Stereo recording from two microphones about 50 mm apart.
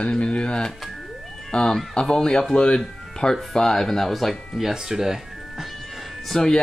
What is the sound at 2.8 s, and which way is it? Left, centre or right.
Music, centre.